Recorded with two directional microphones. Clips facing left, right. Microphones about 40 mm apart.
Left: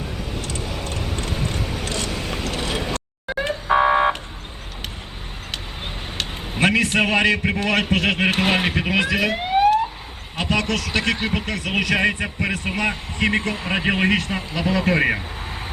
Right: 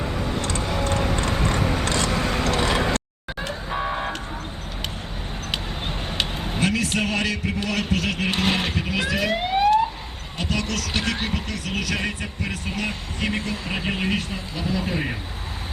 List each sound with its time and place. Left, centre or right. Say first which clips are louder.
0.4 s vehicle: right 4 dB; right
3.7 s car alarm: left 11 dB; left
6.6 s a man's voice: left 5 dB; left
8.3 s speech: left 4 dB; left
8.7 s speech: left 4 dB; left
9.5 s emergency vehicle: left 3 dB; centre
10.3 s speech: left 5 dB; left
11.9 s a man's voice: left 7 dB; left